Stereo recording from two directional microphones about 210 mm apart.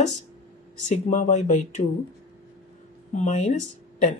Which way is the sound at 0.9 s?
35° left (ahead or behind).